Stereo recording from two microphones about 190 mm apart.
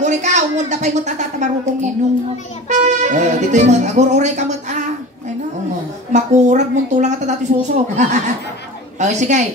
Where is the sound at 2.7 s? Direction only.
40° right (ahead or behind).